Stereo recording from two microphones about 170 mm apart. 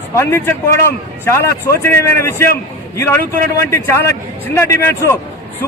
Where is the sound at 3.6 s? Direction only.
15° left (ahead or behind).